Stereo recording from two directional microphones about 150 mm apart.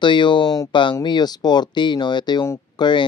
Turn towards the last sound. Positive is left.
turn(degrees=30)  # may be behind; listen again after turning